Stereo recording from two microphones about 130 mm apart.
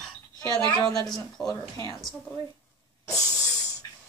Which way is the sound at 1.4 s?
30° left (ahead or behind).